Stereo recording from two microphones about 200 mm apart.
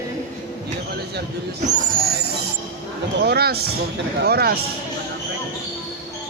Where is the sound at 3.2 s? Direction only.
50° right (ahead or behind).